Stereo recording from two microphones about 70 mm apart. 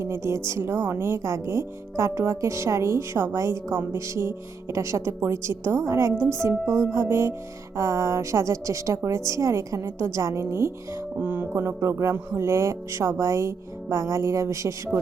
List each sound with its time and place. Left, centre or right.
0.0 s speech: right
6.9 s music: right
7.8 s speech: right
11.2 s music: right
11.5 s speech: right